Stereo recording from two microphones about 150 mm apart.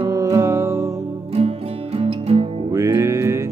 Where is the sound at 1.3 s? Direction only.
45° right (ahead or behind).